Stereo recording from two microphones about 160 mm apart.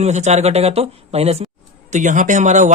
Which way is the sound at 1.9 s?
50° right (ahead or behind).